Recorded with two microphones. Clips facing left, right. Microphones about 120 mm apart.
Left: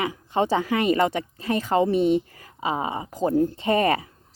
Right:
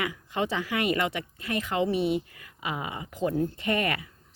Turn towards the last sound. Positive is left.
turn(degrees=35)  # may be behind; listen again after turning